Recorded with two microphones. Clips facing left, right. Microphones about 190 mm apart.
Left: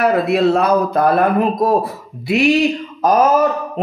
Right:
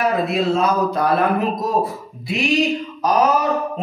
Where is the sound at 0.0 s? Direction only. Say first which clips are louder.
Left 5 dB; 65° left (ahead or behind).